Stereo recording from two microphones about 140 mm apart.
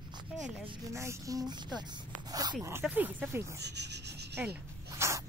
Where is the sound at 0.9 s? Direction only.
20° right (ahead or behind).